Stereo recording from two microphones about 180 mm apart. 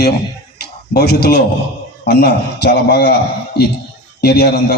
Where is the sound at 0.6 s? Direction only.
60° left (ahead or behind).